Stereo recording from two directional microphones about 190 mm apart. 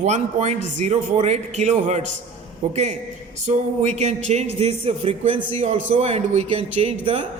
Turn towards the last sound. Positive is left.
turn(degrees=-30)  # may be behind; listen again after turning